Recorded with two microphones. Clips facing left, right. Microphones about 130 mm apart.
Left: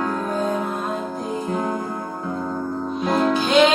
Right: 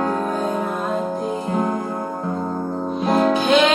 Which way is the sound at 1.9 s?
30° right (ahead or behind).